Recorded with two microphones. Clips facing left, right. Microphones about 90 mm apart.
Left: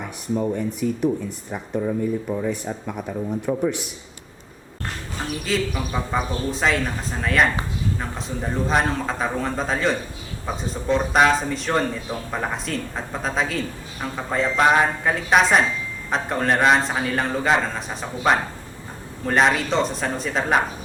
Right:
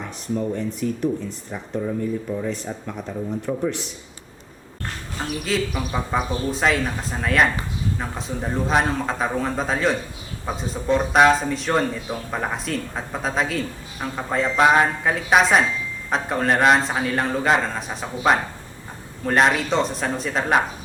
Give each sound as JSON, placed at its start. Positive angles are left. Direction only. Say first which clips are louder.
{"t": 0.3, "sound": "speech", "louder": "left 1 dB", "side_deg": 20}
{"t": 5.5, "sound": "speech", "louder": "even", "side_deg": -5}